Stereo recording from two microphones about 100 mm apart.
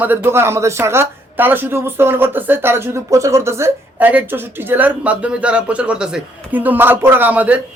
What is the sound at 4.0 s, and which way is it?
Speech, 15° right (ahead or behind).